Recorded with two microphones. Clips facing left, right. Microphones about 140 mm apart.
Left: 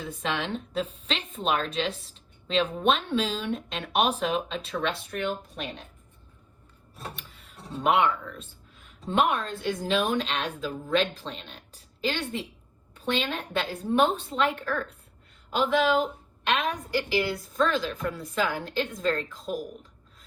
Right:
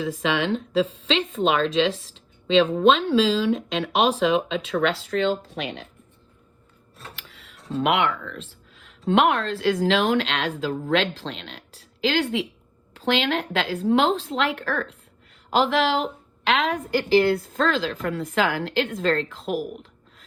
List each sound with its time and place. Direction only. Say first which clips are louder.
0.0 s a woman's voice: right 7 dB; 90° right
7.2 s music: right 1 dB; 90° right
7.7 s a woman's voice: right 2 dB; 80° right